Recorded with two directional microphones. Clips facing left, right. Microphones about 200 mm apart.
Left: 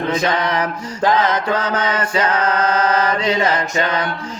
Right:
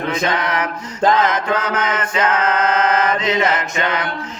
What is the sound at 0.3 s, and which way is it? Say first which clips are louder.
Mantra: left 2 dB; 30° left (ahead or behind).